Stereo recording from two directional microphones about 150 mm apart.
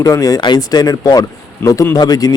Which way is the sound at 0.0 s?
25° left (ahead or behind).